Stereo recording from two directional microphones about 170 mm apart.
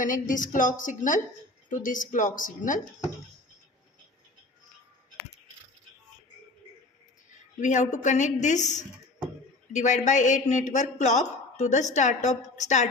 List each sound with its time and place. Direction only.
0.0 s speech: 50° left (ahead or behind)
7.6 s speech: 45° left (ahead or behind)